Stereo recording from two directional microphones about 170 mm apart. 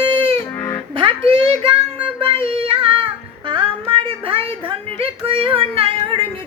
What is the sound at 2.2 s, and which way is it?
Child singing, 30° right (ahead or behind).